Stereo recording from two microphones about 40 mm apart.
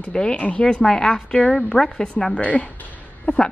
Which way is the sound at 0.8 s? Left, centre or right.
Centre.